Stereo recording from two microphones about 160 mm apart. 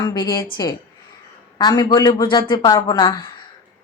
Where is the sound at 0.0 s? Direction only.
25° left (ahead or behind).